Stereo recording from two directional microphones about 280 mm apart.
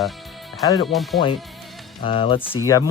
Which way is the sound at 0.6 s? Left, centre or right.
Centre.